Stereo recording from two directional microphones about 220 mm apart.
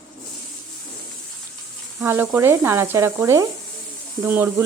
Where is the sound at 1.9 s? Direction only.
10° right (ahead or behind).